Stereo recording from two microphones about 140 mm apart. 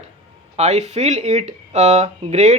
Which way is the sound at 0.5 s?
50° right (ahead or behind).